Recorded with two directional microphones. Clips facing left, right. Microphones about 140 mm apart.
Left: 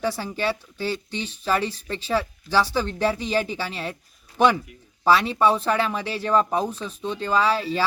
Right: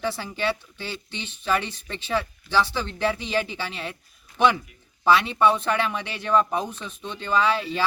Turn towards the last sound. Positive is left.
turn(degrees=35)  # may be behind; listen again after turning